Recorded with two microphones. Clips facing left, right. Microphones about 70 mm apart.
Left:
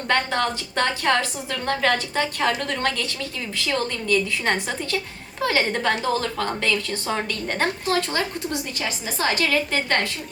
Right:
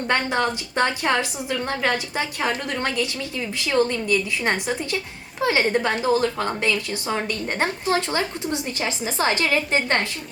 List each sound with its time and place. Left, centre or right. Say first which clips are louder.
0.1 s a woman's voice: even; centre